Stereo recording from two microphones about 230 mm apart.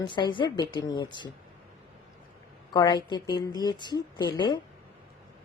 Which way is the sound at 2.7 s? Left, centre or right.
Centre.